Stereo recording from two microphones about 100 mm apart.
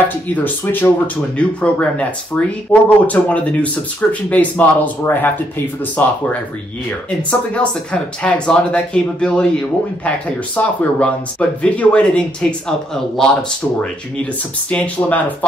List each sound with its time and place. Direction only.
0.3 s speech: 20° left (ahead or behind)
7.2 s speech: 10° left (ahead or behind)